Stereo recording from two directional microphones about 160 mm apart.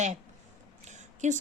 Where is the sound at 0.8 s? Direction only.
50° right (ahead or behind).